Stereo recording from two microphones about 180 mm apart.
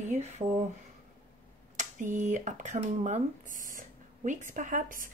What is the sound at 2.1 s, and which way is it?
Speech, 45° right (ahead or behind).